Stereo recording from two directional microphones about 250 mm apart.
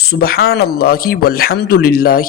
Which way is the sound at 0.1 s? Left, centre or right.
Left.